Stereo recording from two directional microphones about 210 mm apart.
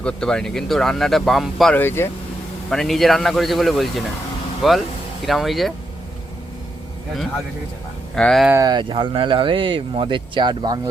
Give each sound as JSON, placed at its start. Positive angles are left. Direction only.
{"t": 0.0, "sound": "speech", "side_deg": 5}
{"t": 8.1, "sound": "speech", "side_deg": 5}
{"t": 8.4, "sound": "speech", "side_deg": -15}